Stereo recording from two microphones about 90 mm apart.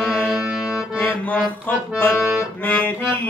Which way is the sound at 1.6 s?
25° left (ahead or behind).